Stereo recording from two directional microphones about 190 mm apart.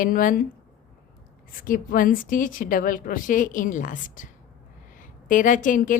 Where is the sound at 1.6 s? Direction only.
45° left (ahead or behind).